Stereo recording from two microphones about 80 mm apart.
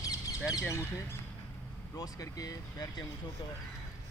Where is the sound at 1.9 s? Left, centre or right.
Left.